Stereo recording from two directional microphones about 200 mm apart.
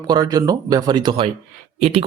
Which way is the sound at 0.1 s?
20° right (ahead or behind).